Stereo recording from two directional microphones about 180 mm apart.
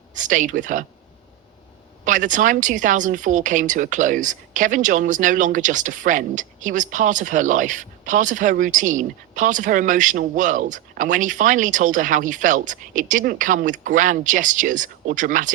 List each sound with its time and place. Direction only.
0.1 s a woman's voice: 45° right (ahead or behind)
2.0 s a woman's voice: 45° right (ahead or behind)